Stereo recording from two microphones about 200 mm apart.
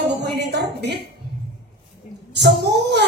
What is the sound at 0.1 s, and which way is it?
Music, 55° right (ahead or behind).